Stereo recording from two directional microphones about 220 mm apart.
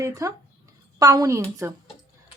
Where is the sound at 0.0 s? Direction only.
15° right (ahead or behind).